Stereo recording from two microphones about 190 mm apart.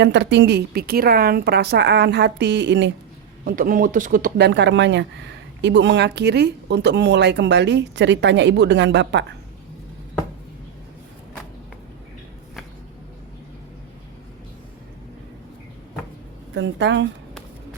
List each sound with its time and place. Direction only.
0.0 s a woman's voice: 65° right (ahead or behind)
3.4 s a woman's voice: 50° right (ahead or behind); by 9.2 s 70° right (ahead or behind)
16.6 s a woman's voice: 70° right (ahead or behind)